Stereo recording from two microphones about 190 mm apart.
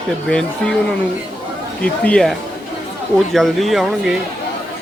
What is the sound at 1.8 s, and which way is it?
Speech, 5° left (ahead or behind).